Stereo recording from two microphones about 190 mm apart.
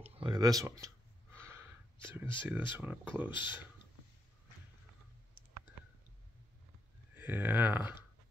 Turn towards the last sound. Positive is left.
turn(degrees=-10)  # may be behind; listen again after turning